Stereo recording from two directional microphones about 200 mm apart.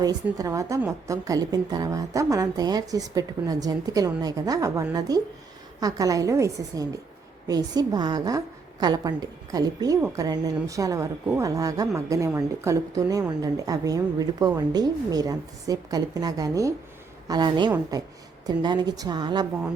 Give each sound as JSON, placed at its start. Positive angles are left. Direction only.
{"t": 0.3, "sound": "a woman's voice", "side_deg": -15}